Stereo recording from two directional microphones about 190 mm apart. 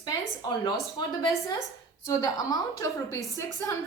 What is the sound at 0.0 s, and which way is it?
A woman's voice, 20° left (ahead or behind).